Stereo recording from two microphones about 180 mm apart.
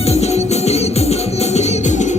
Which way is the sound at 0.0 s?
35° left (ahead or behind).